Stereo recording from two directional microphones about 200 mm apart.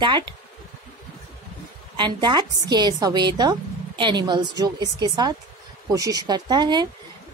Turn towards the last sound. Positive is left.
turn(degrees=-20)  # may be behind; listen again after turning